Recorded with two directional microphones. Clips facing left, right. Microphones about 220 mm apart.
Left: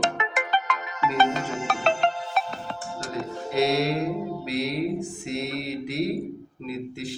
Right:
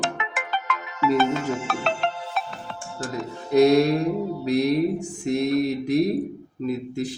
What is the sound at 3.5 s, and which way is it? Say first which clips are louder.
Music: right 7 dB; 45° right (ahead or behind).